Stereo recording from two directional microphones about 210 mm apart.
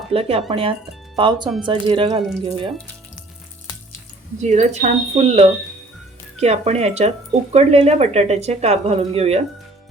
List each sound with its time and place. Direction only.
0.1 s speech: 25° right (ahead or behind)
4.4 s speech: 35° right (ahead or behind)